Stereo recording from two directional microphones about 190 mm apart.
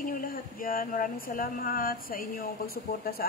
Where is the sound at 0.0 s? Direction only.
50° left (ahead or behind).